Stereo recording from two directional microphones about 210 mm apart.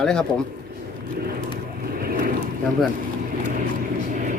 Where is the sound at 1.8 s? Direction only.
45° right (ahead or behind).